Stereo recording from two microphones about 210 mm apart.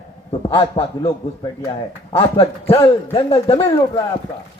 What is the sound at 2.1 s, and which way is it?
A man's voice, 25° left (ahead or behind).